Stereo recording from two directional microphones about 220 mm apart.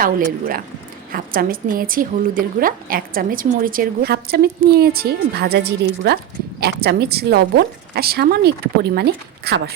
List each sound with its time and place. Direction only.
0.0 s a woman's voice: 40° right (ahead or behind)